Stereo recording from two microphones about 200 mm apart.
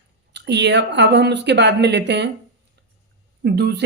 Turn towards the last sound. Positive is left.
turn(degrees=-55)  # may be behind; listen again after turning